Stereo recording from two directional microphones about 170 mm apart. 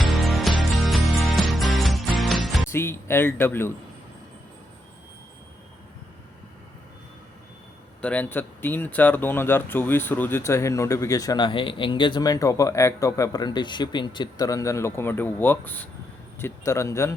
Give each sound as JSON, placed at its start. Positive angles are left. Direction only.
{"t": 0.1, "sound": "music", "side_deg": 0}
{"t": 2.7, "sound": "speech", "side_deg": 15}
{"t": 8.0, "sound": "speech", "side_deg": 10}